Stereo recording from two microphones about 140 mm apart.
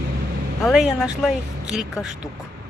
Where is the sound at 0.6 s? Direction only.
Centre (ahead or behind).